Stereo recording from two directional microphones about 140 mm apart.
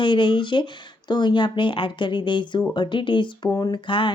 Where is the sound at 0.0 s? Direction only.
35° left (ahead or behind).